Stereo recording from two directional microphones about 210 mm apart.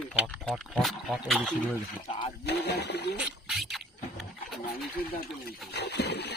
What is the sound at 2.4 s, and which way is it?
Splash, 50° left (ahead or behind).